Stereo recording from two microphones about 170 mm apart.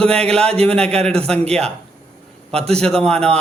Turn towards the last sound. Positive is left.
turn(degrees=5)  # may be behind; listen again after turning